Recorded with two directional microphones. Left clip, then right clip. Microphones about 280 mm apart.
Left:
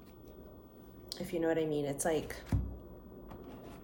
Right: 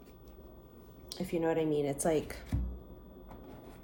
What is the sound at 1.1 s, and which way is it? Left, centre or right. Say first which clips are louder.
Speech: right 1 dB; right.